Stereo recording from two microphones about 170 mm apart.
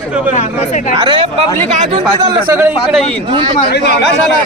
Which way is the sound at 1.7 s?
45° right (ahead or behind).